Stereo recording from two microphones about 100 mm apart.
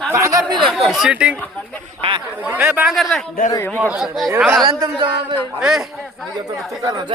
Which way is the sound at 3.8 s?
10° right (ahead or behind).